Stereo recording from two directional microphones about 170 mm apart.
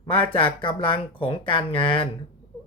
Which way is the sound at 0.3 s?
30° left (ahead or behind).